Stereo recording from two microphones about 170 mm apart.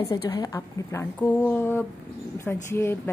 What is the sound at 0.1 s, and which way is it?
A woman's voice, 20° left (ahead or behind).